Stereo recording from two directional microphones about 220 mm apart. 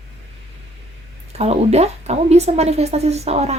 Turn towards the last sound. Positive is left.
turn(degrees=-30)  # may be behind; listen again after turning